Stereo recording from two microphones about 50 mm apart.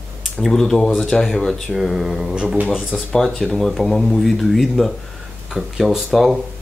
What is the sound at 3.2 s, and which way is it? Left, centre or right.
Speech, centre.